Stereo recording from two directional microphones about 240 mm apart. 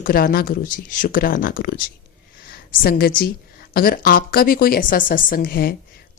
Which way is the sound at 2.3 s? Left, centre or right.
Left.